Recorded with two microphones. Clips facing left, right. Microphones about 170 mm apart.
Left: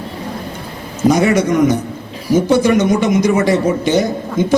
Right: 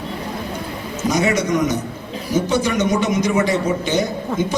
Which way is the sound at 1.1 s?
55° left (ahead or behind).